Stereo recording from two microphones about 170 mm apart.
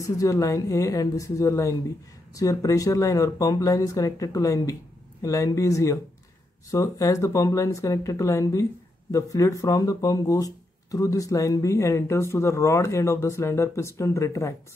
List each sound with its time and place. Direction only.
0.0 s speech: 20° left (ahead or behind)